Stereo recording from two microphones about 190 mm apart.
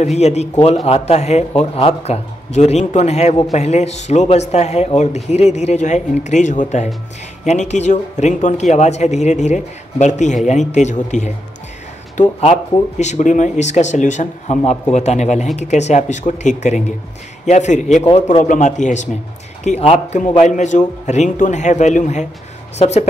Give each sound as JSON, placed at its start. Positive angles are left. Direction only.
{"t": 0.0, "sound": "speech", "side_deg": 35}